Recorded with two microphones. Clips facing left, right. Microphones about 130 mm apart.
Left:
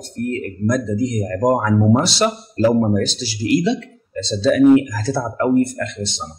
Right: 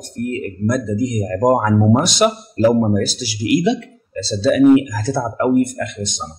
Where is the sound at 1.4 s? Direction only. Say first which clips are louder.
Right 2 dB; 25° right (ahead or behind).